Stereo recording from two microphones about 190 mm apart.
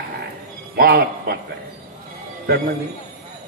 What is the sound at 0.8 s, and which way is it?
Speech, 55° right (ahead or behind).